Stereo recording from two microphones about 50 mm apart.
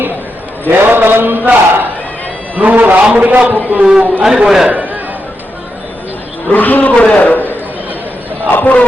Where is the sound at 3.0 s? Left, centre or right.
Right.